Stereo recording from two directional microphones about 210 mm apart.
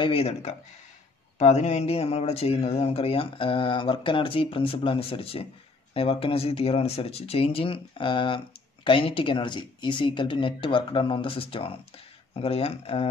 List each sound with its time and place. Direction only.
0.0 s speech: 30° left (ahead or behind)